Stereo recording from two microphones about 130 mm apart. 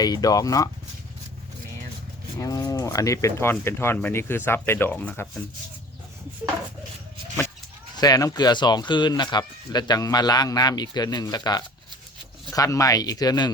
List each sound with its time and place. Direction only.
0.0 s speech: 30° left (ahead or behind)
2.4 s speech: 25° left (ahead or behind); by 5.3 s 10° left (ahead or behind)
7.9 s speech: 30° left (ahead or behind)